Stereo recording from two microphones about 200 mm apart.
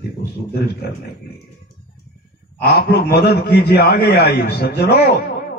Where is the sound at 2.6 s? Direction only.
55° left (ahead or behind).